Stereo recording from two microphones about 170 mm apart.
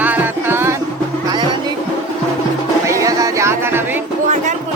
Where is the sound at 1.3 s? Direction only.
25° right (ahead or behind).